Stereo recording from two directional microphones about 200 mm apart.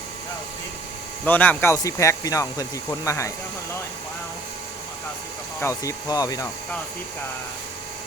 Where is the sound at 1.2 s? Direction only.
10° left (ahead or behind).